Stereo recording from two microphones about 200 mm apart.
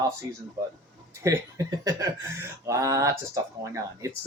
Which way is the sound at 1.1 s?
15° right (ahead or behind).